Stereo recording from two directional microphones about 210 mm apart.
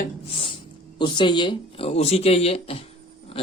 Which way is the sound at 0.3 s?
25° left (ahead or behind).